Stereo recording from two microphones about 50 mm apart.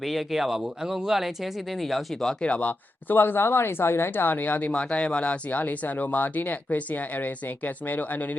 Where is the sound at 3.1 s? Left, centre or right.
Left.